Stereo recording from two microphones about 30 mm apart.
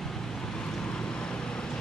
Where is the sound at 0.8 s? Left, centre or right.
Left.